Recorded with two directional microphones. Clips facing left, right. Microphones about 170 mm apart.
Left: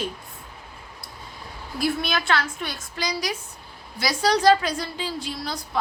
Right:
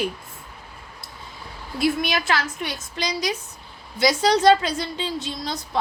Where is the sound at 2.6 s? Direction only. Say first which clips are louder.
Right 1 dB; 20° right (ahead or behind).